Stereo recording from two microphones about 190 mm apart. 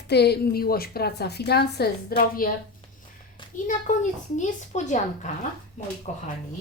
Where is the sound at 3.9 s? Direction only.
40° left (ahead or behind).